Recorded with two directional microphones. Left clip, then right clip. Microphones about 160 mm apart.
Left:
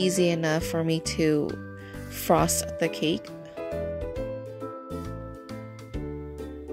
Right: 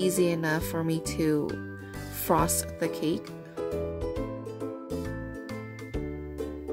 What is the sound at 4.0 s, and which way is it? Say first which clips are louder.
Music: even; centre (ahead or behind).